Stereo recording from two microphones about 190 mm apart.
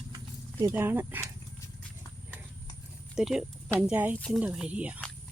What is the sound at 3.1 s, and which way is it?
Speech, centre (ahead or behind).